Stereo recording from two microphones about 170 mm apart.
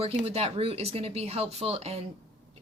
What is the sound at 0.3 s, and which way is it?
A woman's voice, 35° right (ahead or behind).